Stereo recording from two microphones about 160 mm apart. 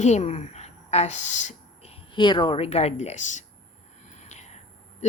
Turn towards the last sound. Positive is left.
turn(degrees=45)  # may be behind; listen again after turning